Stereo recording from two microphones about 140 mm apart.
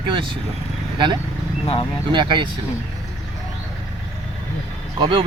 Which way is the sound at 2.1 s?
35° right (ahead or behind).